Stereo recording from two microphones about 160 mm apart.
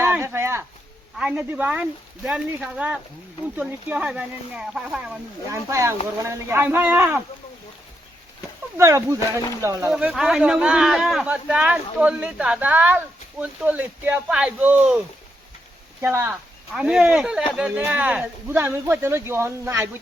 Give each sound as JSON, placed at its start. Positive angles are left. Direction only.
{"t": 0.0, "sound": "a sound", "side_deg": -15}
{"t": 1.1, "sound": "speech", "side_deg": -5}
{"t": 5.5, "sound": "speech", "side_deg": -20}
{"t": 8.8, "sound": "speech", "side_deg": -20}
{"t": 9.9, "sound": "speech", "side_deg": -5}